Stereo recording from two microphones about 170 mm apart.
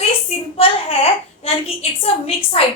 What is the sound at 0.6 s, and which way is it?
A woman's voice, 35° left (ahead or behind).